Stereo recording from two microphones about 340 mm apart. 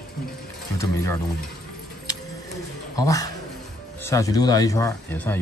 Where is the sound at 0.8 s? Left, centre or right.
Centre.